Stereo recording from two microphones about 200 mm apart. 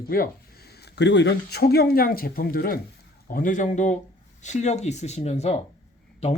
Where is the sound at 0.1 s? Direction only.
45° left (ahead or behind).